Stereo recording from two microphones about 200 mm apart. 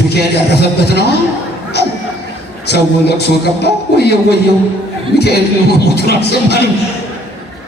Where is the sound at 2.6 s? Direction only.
55° left (ahead or behind).